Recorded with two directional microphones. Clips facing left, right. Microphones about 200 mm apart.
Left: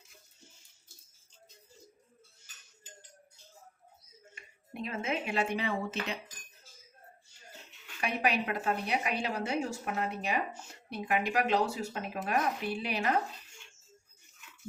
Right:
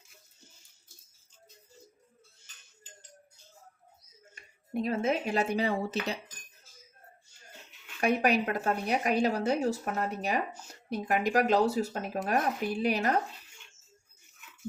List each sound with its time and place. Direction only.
4.7 s a woman's voice: 40° right (ahead or behind)
8.0 s a woman's voice: 45° right (ahead or behind)